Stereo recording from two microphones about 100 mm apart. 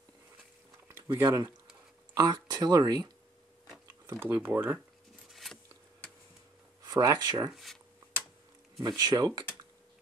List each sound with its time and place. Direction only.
0.8 s speech: 25° right (ahead or behind)
2.1 s speech: 40° right (ahead or behind)
4.0 s a sound: 25° right (ahead or behind)
4.3 s speech: 15° right (ahead or behind)
5.3 s a sound: centre (ahead or behind)
6.8 s speech: 40° right (ahead or behind)
7.5 s speech: centre (ahead or behind)
8.7 s speech: 40° right (ahead or behind)